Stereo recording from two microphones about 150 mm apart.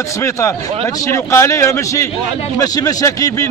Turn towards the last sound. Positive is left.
turn(degrees=20)  # may be behind; listen again after turning